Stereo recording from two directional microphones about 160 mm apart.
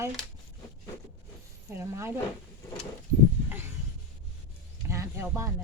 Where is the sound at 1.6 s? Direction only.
15° right (ahead or behind).